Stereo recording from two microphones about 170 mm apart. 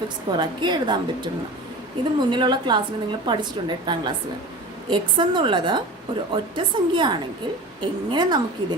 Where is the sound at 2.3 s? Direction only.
25° right (ahead or behind).